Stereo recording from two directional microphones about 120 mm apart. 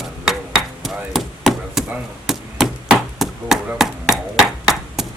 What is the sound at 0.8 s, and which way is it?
Chop, centre (ahead or behind).